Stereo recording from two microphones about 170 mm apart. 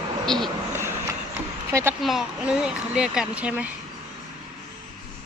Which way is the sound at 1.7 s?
15° right (ahead or behind).